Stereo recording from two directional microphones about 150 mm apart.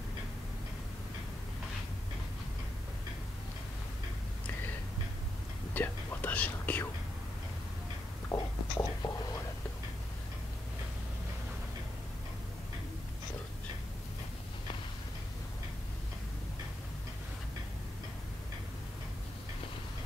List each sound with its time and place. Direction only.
5.8 s whispering: 10° left (ahead or behind)
8.3 s whispering: 20° left (ahead or behind)